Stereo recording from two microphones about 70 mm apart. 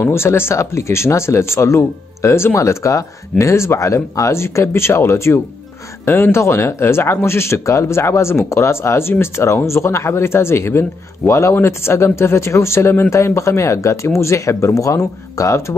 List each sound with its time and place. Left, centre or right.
0.0 s speech: left